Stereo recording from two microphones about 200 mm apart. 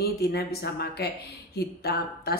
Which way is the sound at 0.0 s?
50° left (ahead or behind).